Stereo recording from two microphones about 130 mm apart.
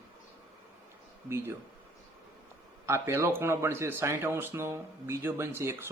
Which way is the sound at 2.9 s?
20° right (ahead or behind).